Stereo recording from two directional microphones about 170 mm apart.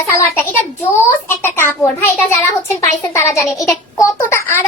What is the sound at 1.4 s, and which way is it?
A child's voice, 15° left (ahead or behind).